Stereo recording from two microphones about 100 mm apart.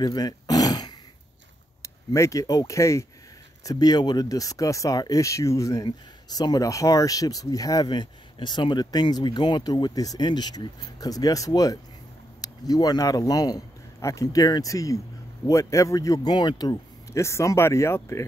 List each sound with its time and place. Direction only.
0.0 s dog: 40° left (ahead or behind)
1.8 s a man's voice: 30° left (ahead or behind)
17.2 s speech: 30° left (ahead or behind)